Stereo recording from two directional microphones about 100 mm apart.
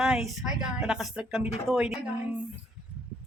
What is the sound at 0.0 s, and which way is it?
Speech, 5° right (ahead or behind).